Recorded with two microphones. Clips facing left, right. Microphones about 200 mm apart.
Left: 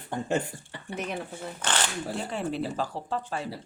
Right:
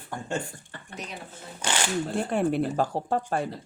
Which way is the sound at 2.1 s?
55° right (ahead or behind).